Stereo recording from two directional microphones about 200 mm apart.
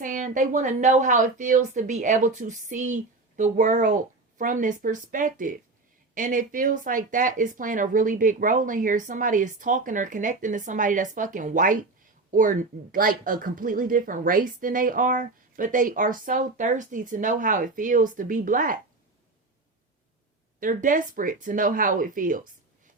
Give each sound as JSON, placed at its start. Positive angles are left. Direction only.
{"t": 0.0, "sound": "speech", "side_deg": -40}
{"t": 20.6, "sound": "speech", "side_deg": -40}